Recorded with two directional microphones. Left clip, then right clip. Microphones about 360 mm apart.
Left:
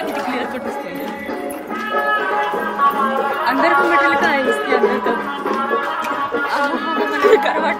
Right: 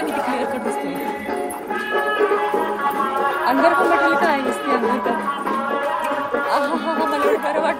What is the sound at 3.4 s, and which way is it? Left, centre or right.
Speech, centre.